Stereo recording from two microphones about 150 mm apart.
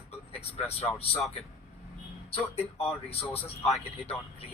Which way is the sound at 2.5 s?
40° left (ahead or behind).